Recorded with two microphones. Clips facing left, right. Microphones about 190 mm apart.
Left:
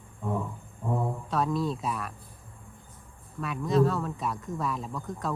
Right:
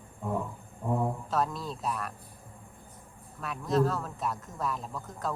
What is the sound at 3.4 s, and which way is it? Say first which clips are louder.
A man's voice: left 3 dB; centre (ahead or behind).